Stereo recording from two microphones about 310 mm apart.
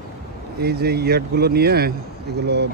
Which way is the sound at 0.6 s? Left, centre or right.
Right.